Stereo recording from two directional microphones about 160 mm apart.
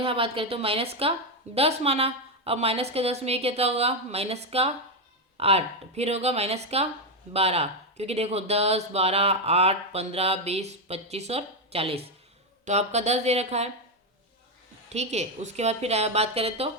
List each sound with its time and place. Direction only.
0.0 s a woman's voice: 35° right (ahead or behind)
14.8 s a woman's voice: 45° right (ahead or behind)